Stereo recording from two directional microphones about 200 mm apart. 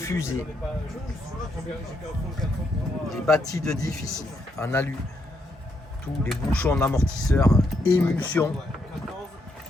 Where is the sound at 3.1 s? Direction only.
Centre (ahead or behind).